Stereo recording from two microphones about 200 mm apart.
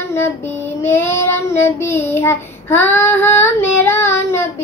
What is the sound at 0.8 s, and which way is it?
Child singing, 10° left (ahead or behind).